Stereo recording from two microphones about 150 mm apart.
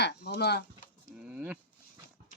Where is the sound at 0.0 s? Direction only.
90° left.